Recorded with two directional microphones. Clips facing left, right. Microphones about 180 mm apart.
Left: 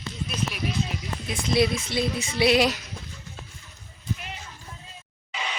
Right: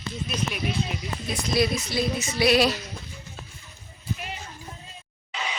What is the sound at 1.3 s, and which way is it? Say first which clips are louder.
A woman's voice: left 1 dB; 25° left (ahead or behind).